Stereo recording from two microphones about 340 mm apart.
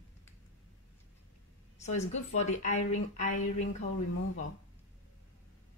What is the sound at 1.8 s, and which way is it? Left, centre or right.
A woman's voice, left.